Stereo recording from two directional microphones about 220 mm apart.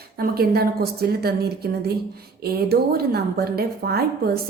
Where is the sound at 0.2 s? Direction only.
45° right (ahead or behind).